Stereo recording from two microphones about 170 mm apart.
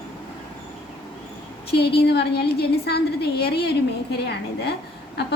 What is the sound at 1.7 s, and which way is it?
A woman's voice, 75° left (ahead or behind).